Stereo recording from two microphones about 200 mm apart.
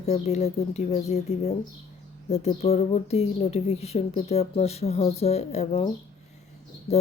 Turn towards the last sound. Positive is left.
turn(degrees=35)  # may be behind; listen again after turning